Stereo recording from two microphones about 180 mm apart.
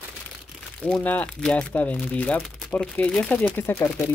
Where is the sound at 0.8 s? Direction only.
5° left (ahead or behind).